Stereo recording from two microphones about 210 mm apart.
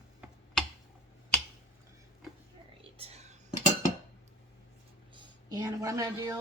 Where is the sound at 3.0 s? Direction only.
30° right (ahead or behind).